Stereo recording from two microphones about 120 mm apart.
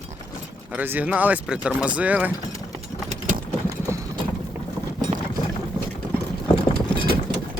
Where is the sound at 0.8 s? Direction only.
15° right (ahead or behind).